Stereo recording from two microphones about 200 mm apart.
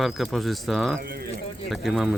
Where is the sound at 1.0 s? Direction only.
50° right (ahead or behind).